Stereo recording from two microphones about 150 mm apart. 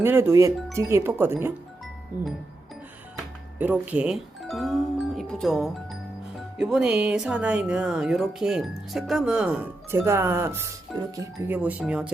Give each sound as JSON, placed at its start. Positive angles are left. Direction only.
{"t": 0.0, "sound": "speech", "side_deg": -15}
{"t": 3.6, "sound": "speech", "side_deg": -10}
{"t": 11.4, "sound": "speech", "side_deg": -10}